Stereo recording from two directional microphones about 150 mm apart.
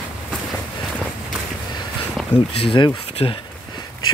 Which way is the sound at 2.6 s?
35° left (ahead or behind).